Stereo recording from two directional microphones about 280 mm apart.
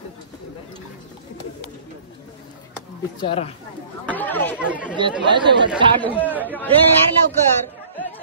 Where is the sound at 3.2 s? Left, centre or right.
Centre.